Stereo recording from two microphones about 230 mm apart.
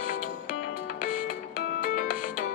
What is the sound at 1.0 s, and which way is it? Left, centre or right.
Music, left.